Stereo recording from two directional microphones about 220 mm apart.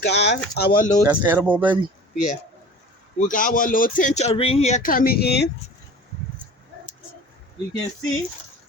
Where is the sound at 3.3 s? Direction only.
35° left (ahead or behind).